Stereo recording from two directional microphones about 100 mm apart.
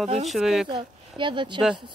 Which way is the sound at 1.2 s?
50° right (ahead or behind).